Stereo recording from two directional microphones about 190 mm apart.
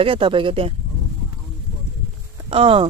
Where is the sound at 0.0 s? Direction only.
30° right (ahead or behind).